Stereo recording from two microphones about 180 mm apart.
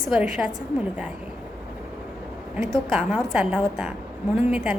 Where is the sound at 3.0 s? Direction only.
10° right (ahead or behind).